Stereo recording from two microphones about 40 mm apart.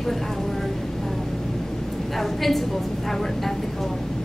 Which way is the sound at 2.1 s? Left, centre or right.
Centre.